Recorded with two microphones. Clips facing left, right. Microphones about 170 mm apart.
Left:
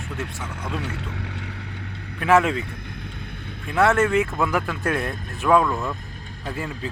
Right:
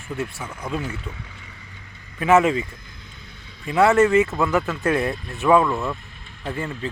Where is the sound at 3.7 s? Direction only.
5° right (ahead or behind).